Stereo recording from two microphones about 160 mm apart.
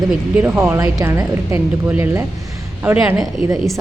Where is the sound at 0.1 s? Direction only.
10° right (ahead or behind).